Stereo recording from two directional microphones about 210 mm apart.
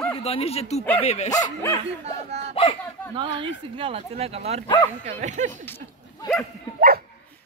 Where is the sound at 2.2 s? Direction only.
30° right (ahead or behind).